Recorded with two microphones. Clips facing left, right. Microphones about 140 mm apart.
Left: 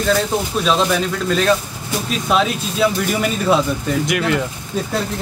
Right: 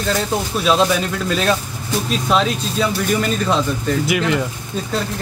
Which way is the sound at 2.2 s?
5° left (ahead or behind).